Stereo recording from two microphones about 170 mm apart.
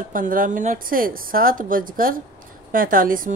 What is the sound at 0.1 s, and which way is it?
Speech, 55° right (ahead or behind).